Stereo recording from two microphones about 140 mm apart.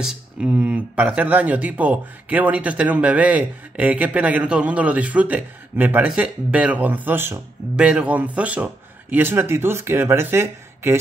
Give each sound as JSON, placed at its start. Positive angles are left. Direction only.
{"t": 0.0, "sound": "speech", "side_deg": -10}